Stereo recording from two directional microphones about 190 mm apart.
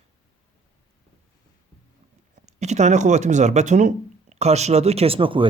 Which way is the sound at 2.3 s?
35° right (ahead or behind).